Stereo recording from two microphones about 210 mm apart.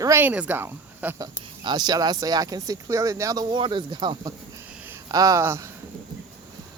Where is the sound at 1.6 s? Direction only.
20° right (ahead or behind).